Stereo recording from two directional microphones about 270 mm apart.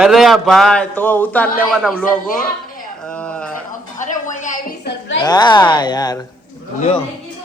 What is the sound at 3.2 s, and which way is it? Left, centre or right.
Speech, centre.